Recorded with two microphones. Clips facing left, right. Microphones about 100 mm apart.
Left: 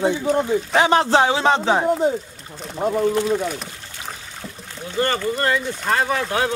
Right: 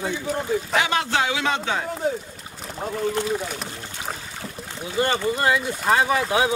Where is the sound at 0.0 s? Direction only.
25° left (ahead or behind).